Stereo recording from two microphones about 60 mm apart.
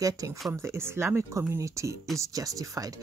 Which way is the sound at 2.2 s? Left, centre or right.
Right.